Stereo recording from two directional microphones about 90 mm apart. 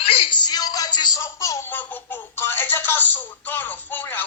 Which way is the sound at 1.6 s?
20° left (ahead or behind).